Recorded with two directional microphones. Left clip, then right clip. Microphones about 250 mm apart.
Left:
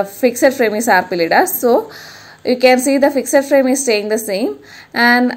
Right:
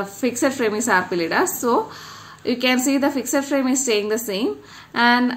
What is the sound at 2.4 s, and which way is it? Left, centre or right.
Speech, right.